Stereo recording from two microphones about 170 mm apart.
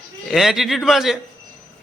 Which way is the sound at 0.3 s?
Centre (ahead or behind).